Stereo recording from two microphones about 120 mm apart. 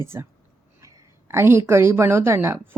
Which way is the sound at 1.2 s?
20° right (ahead or behind).